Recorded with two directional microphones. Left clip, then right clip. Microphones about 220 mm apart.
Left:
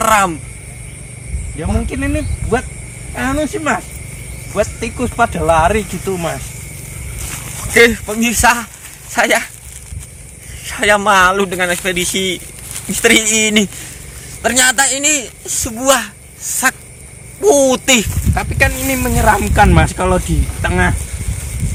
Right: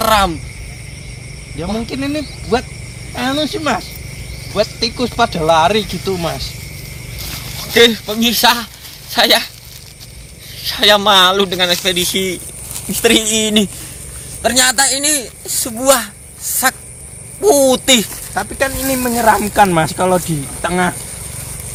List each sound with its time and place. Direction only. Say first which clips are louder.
0.0 s speech: left 1 dB; 15° right (ahead or behind)
1.5 s speech: even; 5° left (ahead or behind)
7.6 s speech: left 1 dB; centre (ahead or behind)
10.6 s speech: right 2 dB; 10° right (ahead or behind)
15.4 s speech: right 1 dB; 20° right (ahead or behind)
17.4 s speech: even; centre (ahead or behind)
18.3 s speech: left 2 dB; 10° left (ahead or behind)